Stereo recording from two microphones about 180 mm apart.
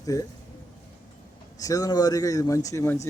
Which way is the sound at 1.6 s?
20° left (ahead or behind).